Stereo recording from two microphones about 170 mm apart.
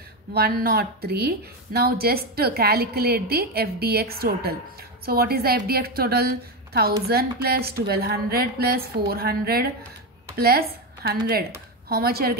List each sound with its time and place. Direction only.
0.3 s speech: 65° right (ahead or behind)